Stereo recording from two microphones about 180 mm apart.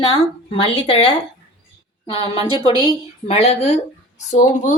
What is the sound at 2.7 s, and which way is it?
Speech, 20° right (ahead or behind).